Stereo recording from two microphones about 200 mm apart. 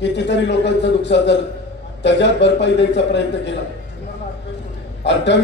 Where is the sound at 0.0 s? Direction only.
60° left (ahead or behind).